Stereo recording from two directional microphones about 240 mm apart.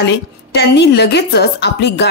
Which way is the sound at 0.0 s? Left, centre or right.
Left.